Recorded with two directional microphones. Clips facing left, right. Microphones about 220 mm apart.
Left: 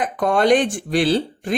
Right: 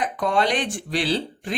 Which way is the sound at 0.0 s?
50° left (ahead or behind).